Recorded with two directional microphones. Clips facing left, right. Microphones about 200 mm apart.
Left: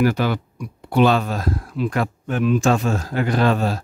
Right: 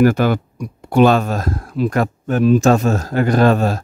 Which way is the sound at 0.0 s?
50° right (ahead or behind).